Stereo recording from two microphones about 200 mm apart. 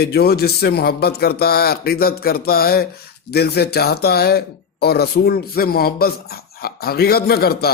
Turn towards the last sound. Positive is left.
turn(degrees=50)  # may be behind; listen again after turning